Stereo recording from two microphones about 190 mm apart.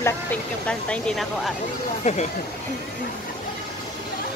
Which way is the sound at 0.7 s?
5° left (ahead or behind).